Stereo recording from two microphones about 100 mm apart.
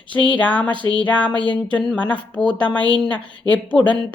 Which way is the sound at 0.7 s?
55° right (ahead or behind).